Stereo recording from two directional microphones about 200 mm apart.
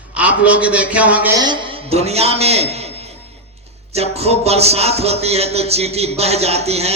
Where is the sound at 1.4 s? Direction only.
25° right (ahead or behind).